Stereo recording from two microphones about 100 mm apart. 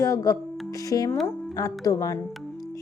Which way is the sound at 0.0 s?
30° left (ahead or behind).